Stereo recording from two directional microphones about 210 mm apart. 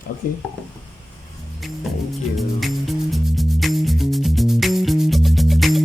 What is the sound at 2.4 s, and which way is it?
Music, centre (ahead or behind).